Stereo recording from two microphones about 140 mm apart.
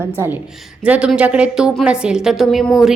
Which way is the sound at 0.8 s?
10° right (ahead or behind).